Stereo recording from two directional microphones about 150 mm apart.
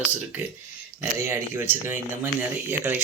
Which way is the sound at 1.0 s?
15° right (ahead or behind).